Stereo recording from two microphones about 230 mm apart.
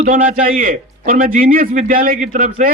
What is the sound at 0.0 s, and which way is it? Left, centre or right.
A man's voice, right.